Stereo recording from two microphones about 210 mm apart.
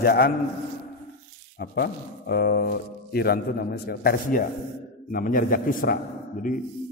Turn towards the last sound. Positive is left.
turn(degrees=45)  # may be behind; listen again after turning